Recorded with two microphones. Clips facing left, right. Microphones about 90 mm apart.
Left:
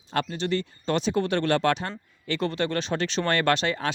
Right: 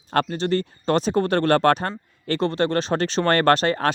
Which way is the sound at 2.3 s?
35° right (ahead or behind).